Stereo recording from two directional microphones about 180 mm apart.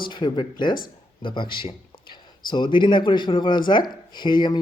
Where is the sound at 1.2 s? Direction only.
25° left (ahead or behind).